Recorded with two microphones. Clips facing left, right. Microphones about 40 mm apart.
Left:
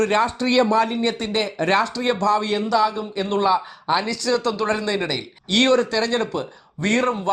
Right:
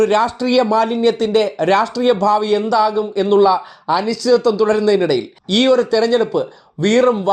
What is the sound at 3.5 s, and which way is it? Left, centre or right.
Speech, left.